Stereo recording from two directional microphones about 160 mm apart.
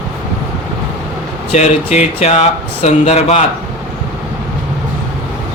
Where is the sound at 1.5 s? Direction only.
45° left (ahead or behind).